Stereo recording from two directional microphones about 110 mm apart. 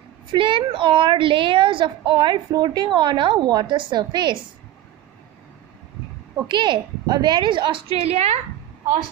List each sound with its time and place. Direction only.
0.3 s a woman's voice: 50° right (ahead or behind)
6.4 s a woman's voice: 45° right (ahead or behind); by 8.4 s 75° right (ahead or behind)